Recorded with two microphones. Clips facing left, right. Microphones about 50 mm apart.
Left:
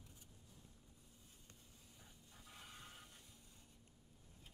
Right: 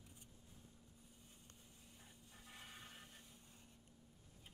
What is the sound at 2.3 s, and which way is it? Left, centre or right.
Printer, centre.